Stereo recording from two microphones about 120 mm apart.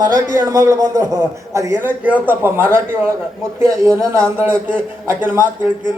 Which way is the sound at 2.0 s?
15° right (ahead or behind).